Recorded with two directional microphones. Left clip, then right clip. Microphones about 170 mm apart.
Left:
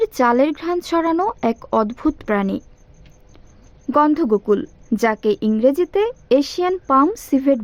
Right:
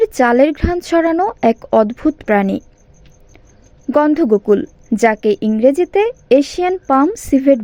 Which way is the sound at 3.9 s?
15° right (ahead or behind).